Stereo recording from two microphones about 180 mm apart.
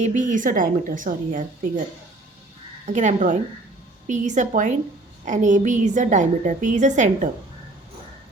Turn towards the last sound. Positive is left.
turn(degrees=-45)  # may be behind; listen again after turning